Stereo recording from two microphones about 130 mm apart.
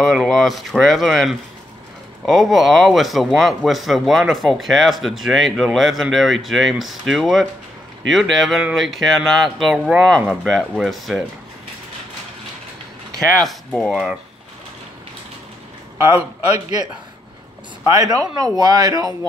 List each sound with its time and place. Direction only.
0.0 s a man's voice: 5° left (ahead or behind)
13.4 s a man's voice: 5° left (ahead or behind)
17.9 s speech: 30° right (ahead or behind)